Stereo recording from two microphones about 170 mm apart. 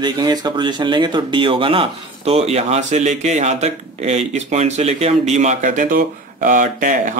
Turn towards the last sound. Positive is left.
turn(degrees=-50)  # may be behind; listen again after turning